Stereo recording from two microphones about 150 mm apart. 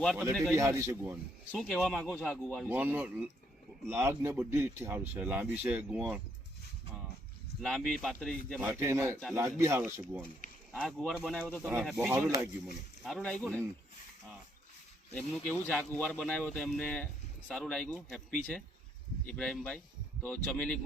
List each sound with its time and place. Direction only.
0.0 s speech: centre (ahead or behind)
0.5 s a man's voice: 20° right (ahead or behind)
1.5 s speech: centre (ahead or behind)
2.0 s speech: 15° left (ahead or behind)
2.6 s a man's voice: 10° right (ahead or behind)
7.6 s speech: 5° left (ahead or behind)
8.6 s a man's voice: 15° right (ahead or behind)
10.8 s speech: centre (ahead or behind)
13.1 s speech: centre (ahead or behind)
15.1 s speech: 10° left (ahead or behind)